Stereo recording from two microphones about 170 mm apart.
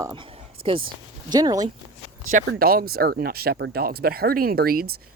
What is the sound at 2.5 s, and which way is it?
Speech, 60° right (ahead or behind).